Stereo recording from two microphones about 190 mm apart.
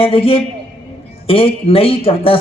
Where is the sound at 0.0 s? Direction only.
30° left (ahead or behind).